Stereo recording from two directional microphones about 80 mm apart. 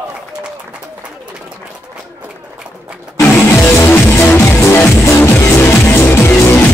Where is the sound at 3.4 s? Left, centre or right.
Left.